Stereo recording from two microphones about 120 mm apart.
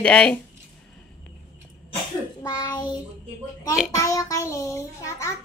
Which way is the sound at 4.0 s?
25° left (ahead or behind).